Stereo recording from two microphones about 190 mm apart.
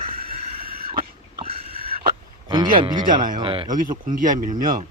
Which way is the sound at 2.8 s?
25° right (ahead or behind).